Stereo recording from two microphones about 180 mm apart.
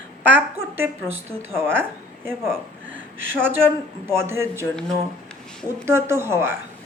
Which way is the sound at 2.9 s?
90° right.